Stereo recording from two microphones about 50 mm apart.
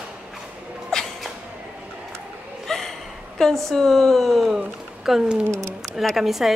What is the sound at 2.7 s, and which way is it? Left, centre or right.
A woman's voice, centre.